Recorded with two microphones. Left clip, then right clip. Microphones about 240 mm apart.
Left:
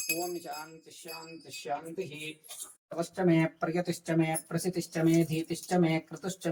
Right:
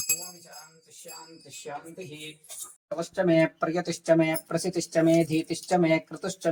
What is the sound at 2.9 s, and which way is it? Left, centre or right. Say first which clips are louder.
Speech: right 5 dB; right.